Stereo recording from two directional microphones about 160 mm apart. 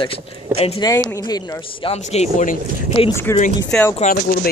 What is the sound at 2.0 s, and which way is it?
Speech, 45° left (ahead or behind).